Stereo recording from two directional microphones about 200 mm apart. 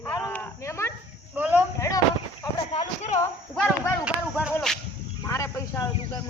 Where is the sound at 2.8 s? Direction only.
35° left (ahead or behind).